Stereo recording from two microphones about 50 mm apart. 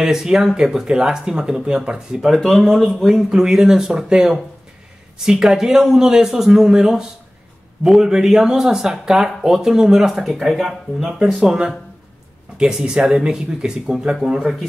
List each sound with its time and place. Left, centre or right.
0.0 s speech: centre
2.5 s speech: centre
3.3 s speech: centre